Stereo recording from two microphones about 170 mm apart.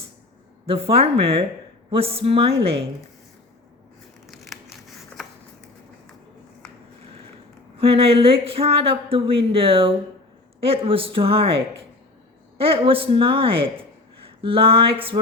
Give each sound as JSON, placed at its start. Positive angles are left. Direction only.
{"t": 0.6, "sound": "speech", "side_deg": -35}
{"t": 4.3, "sound": "scissors", "side_deg": 0}
{"t": 7.8, "sound": "speech", "side_deg": -35}